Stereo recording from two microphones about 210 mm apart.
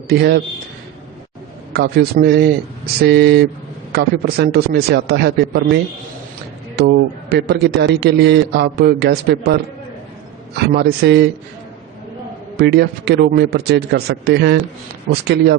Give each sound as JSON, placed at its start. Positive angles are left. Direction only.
{"t": 0.1, "sound": "a man's voice", "side_deg": -50}
{"t": 1.7, "sound": "a man's voice", "side_deg": -50}
{"t": 6.8, "sound": "a man's voice", "side_deg": -50}
{"t": 10.7, "sound": "a man's voice", "side_deg": -50}
{"t": 12.5, "sound": "a man's voice", "side_deg": -50}